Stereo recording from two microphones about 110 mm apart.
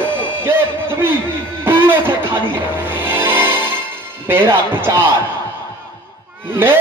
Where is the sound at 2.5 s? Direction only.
20° right (ahead or behind).